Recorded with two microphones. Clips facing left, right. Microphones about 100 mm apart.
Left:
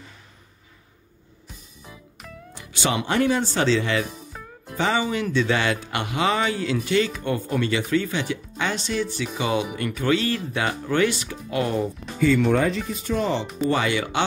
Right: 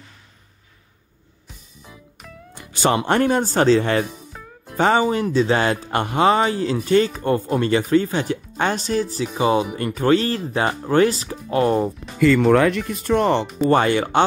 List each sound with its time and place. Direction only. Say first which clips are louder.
2.5 s music: right 6 dB; 40° right (ahead or behind)
3.1 s speech: right 3 dB; 50° right (ahead or behind)
4.3 s music: even; centre (ahead or behind)
4.7 s speech: right 6 dB; 45° right (ahead or behind)
12.4 s speech: right 5 dB; 75° right (ahead or behind)
13.7 s speech: right 6 dB; 45° right (ahead or behind)